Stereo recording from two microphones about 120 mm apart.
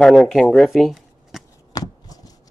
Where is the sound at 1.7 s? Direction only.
30° left (ahead or behind).